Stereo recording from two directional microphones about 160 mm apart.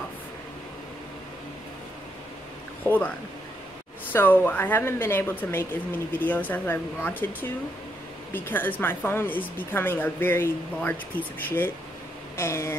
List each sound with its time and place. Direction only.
2.8 s speech: 10° left (ahead or behind)
4.1 s speech: 15° left (ahead or behind)
8.3 s speech: 10° left (ahead or behind)